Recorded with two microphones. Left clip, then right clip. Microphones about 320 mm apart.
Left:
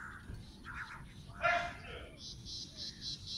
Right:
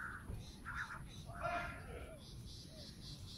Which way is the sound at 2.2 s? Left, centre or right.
Left.